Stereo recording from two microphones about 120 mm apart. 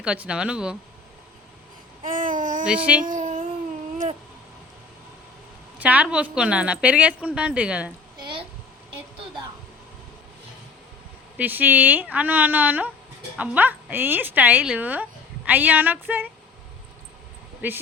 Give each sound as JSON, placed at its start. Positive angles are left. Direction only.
{"t": 0.0, "sound": "a woman's voice", "side_deg": -10}
{"t": 2.0, "sound": "babbling", "side_deg": -90}
{"t": 2.6, "sound": "a woman's voice", "side_deg": -10}
{"t": 3.0, "sound": "child singing", "side_deg": -90}
{"t": 5.8, "sound": "a woman's voice", "side_deg": -10}
{"t": 8.2, "sound": "a sound", "side_deg": -45}
{"t": 11.3, "sound": "a woman's voice", "side_deg": -15}
{"t": 17.6, "sound": "a woman's voice", "side_deg": -15}